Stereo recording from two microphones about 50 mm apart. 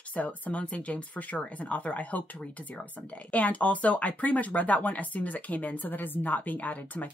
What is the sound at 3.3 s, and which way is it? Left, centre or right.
Speech, left.